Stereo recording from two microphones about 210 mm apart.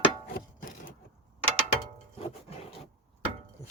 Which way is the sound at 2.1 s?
30° left (ahead or behind).